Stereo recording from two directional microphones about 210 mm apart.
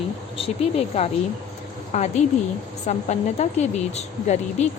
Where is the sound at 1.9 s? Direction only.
35° left (ahead or behind).